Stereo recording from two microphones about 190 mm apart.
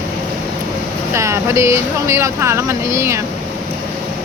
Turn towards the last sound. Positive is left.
turn(degrees=-15)  # may be behind; listen again after turning